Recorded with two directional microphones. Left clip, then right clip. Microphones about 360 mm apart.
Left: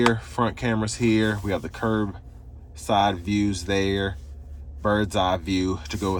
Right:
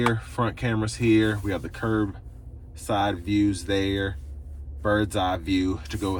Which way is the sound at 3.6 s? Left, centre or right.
Centre.